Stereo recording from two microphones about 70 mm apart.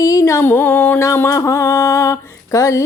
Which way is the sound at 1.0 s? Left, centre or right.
Left.